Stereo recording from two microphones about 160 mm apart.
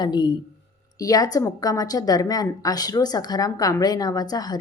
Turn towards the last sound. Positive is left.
turn(degrees=25)  # may be behind; listen again after turning